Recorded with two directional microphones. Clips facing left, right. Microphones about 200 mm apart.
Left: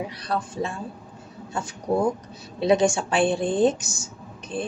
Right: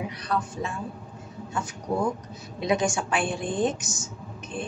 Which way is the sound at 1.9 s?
30° left (ahead or behind).